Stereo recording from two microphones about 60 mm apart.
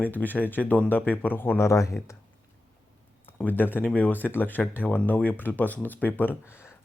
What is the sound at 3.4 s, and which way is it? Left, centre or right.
Speech, left.